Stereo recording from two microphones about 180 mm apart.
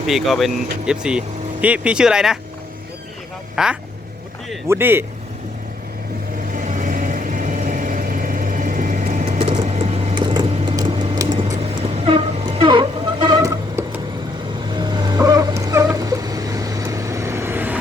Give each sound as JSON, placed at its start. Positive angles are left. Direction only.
{"t": 0.1, "sound": "speech", "side_deg": 0}
{"t": 3.5, "sound": "speech", "side_deg": -5}
{"t": 6.5, "sound": "vehicle", "side_deg": -45}
{"t": 11.5, "sound": "a sound", "side_deg": -35}
{"t": 14.7, "sound": "dog", "side_deg": -25}